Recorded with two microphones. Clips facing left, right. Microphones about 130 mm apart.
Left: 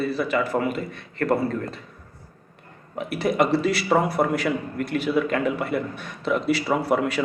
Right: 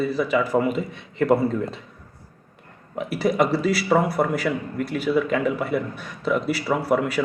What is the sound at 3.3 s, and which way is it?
Speech, centre (ahead or behind).